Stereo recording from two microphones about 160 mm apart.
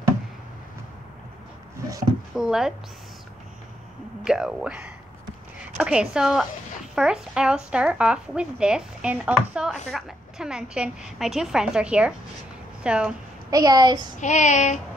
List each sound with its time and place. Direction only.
2.3 s speech: 5° right (ahead or behind)
4.2 s speech: 5° right (ahead or behind)
13.5 s a woman's voice: 25° right (ahead or behind)
14.2 s child singing: 50° left (ahead or behind)